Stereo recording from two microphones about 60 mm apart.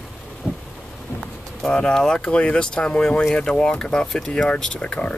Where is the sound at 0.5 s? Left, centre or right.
Right.